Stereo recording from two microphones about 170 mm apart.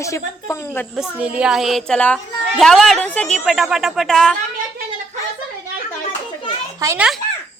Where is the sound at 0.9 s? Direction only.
5° right (ahead or behind).